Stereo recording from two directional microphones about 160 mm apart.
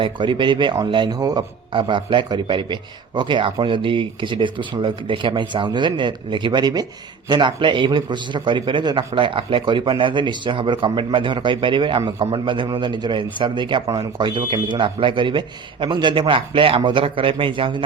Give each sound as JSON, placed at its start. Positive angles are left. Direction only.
{"t": 0.0, "sound": "a man's voice", "side_deg": -30}